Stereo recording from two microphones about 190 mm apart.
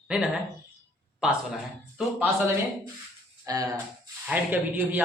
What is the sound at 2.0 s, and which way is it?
Speech, centre (ahead or behind).